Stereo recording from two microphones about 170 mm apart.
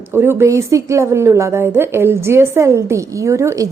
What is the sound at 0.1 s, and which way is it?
A woman's voice, 15° right (ahead or behind).